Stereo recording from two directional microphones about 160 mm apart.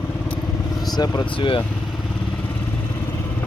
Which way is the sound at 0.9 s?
25° left (ahead or behind).